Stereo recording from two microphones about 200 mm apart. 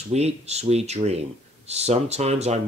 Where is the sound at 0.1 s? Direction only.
35° right (ahead or behind).